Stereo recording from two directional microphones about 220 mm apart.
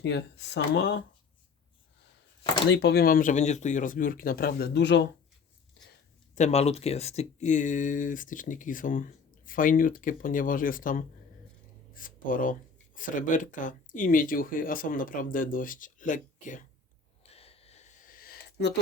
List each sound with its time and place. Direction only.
0.0 s speech: 50° left (ahead or behind)
2.6 s speech: 50° left (ahead or behind)
6.3 s speech: 30° left (ahead or behind)
17.2 s a sound: 25° left (ahead or behind); by 18.7 s 40° left (ahead or behind)